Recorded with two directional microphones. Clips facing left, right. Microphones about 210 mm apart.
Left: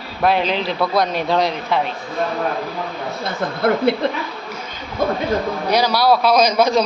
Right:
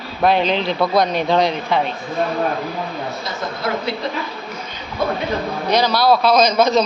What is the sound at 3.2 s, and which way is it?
Speech, 55° left (ahead or behind).